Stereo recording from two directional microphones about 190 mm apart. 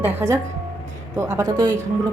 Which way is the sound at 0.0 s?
10° right (ahead or behind).